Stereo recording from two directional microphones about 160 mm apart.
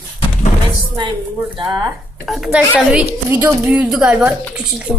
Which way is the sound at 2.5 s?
5° right (ahead or behind).